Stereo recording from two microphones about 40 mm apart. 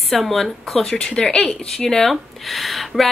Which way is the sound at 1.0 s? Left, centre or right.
Left.